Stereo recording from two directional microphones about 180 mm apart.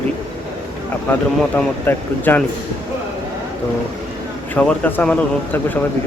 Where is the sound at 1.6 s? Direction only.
5° left (ahead or behind).